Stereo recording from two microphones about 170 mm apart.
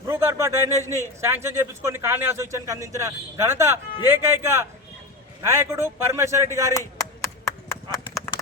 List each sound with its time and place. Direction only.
0.1 s a sound: 15° right (ahead or behind)
1.2 s a man's voice: 15° right (ahead or behind)
6.7 s clip-clop: 15° left (ahead or behind)